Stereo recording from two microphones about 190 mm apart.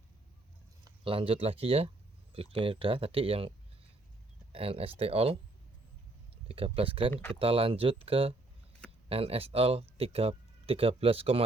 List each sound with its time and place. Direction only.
0.9 s speech: 30° right (ahead or behind)
4.5 s speech: 30° right (ahead or behind)
6.5 s speech: 30° right (ahead or behind)